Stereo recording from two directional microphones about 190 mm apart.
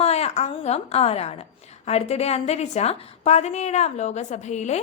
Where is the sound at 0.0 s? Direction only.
35° left (ahead or behind).